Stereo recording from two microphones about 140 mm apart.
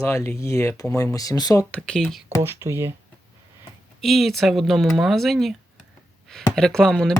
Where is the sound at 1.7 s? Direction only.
5° left (ahead or behind).